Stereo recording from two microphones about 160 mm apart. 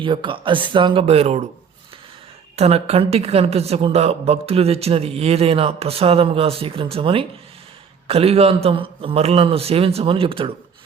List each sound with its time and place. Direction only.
0.0 s a woman's voice: 30° right (ahead or behind)
2.6 s a woman's voice: 40° right (ahead or behind)